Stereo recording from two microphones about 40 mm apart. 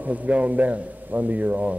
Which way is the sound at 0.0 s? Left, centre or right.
Right.